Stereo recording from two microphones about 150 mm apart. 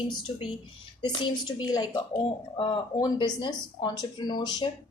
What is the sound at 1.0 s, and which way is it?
A woman's voice, 30° left (ahead or behind).